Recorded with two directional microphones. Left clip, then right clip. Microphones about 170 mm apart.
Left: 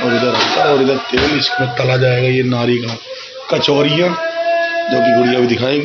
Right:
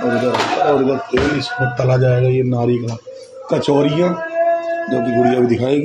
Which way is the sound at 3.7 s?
20° right (ahead or behind).